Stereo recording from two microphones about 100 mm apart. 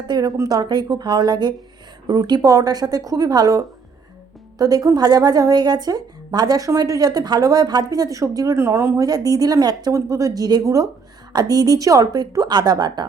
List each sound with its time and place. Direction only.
0.1 s a woman's voice: 40° right (ahead or behind); by 9.0 s 25° right (ahead or behind)
9.0 s a woman's voice: 40° right (ahead or behind)